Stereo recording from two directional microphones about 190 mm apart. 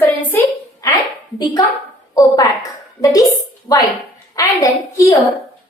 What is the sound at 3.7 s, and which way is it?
A woman's voice, 20° left (ahead or behind).